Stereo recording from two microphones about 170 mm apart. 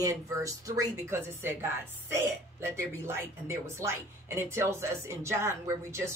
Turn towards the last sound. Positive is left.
turn(degrees=-15)  # may be behind; listen again after turning